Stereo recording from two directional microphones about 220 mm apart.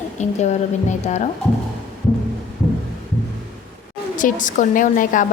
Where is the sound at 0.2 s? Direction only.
30° left (ahead or behind).